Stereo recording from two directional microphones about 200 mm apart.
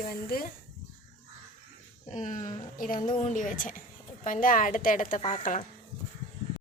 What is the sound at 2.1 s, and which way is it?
A woman's voice, 40° left (ahead or behind).